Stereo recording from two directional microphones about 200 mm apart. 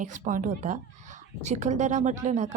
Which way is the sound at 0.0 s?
40° right (ahead or behind).